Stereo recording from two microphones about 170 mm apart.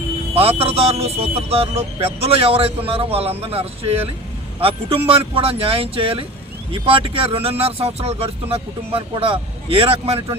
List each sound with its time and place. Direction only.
0.3 s speech: 35° right (ahead or behind)